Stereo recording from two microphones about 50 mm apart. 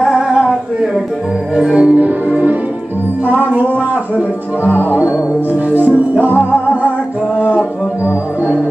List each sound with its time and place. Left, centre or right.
0.0 s music: centre
1.9 s music: right
7.3 s music: left